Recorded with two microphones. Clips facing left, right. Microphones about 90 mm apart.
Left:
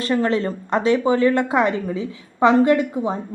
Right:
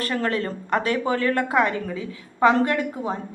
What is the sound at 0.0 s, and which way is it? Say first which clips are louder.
A woman's voice: left 5 dB; 20° left (ahead or behind).